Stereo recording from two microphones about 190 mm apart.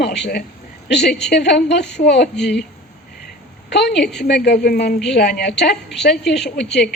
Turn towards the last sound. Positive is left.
turn(degrees=60)  # may be behind; listen again after turning